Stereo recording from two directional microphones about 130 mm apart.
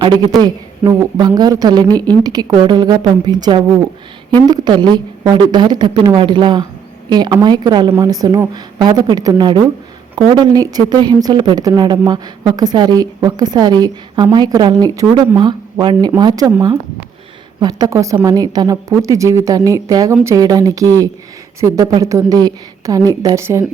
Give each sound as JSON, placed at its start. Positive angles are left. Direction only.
{"t": 0.3, "sound": "a woman's voice", "side_deg": -30}
{"t": 17.6, "sound": "a woman's voice", "side_deg": -30}